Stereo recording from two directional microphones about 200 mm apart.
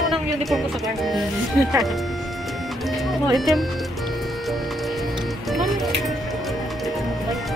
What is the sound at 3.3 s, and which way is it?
Speech, centre (ahead or behind).